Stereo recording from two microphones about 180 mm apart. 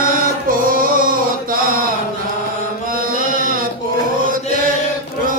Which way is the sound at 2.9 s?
50° right (ahead or behind).